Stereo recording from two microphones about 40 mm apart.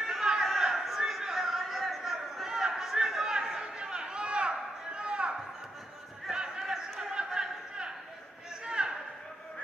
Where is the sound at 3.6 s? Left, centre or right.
Right.